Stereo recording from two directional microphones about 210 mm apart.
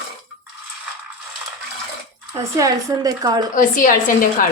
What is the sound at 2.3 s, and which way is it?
Speech, 15° right (ahead or behind).